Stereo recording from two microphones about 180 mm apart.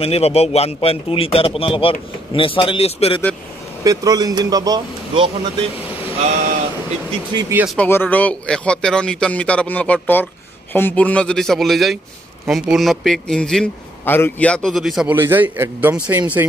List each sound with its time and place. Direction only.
0.0 s a man's voice: 35° left (ahead or behind)
3.8 s speech: 20° right (ahead or behind)
7.3 s speech: 15° right (ahead or behind)
7.6 s a man's voice: 5° left (ahead or behind); by 16.4 s 10° right (ahead or behind)